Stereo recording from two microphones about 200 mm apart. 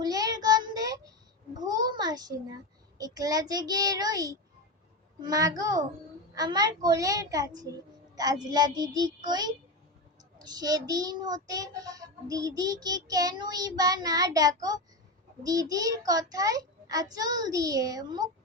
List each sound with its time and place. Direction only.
0.0 s child singing: 20° right (ahead or behind)
1.5 s a sound: 20° right (ahead or behind)
3.0 s child singing: 20° right (ahead or behind)
10.3 s child singing: 20° right (ahead or behind)
15.4 s a child's voice: 15° right (ahead or behind)